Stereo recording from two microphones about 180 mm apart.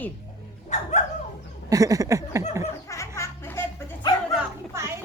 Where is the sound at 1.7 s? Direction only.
20° right (ahead or behind).